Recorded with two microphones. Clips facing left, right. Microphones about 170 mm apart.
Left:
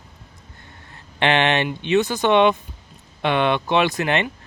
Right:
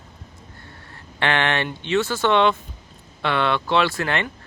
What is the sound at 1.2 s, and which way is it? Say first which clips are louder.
Speech: left 3 dB; 20° left (ahead or behind).